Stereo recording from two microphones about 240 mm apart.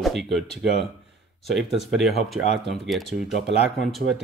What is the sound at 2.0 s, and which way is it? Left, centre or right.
Speech, centre.